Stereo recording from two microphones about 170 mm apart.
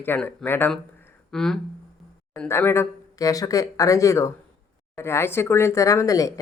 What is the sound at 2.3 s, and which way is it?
Speech, 15° left (ahead or behind).